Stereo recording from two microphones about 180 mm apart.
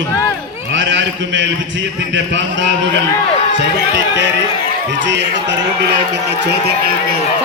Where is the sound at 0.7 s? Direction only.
90° right.